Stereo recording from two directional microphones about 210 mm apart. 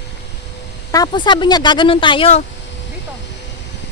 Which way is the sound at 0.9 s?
20° left (ahead or behind).